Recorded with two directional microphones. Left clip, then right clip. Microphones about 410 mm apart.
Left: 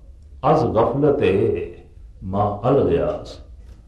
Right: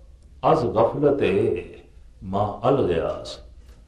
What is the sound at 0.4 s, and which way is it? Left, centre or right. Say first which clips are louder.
A man's voice: left 2 dB; centre.